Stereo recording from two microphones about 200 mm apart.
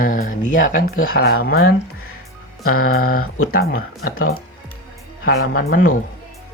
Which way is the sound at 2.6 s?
90° left.